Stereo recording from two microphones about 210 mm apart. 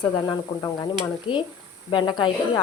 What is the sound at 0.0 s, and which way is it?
Speech, 20° left (ahead or behind).